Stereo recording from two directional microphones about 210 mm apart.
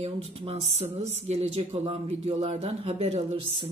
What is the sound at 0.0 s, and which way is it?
Speech, 30° right (ahead or behind).